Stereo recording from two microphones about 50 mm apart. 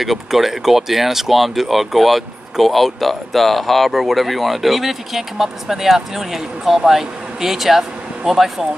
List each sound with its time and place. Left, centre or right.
0.0 s speech: centre